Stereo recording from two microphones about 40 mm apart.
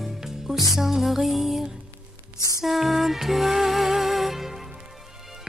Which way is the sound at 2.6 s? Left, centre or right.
Centre.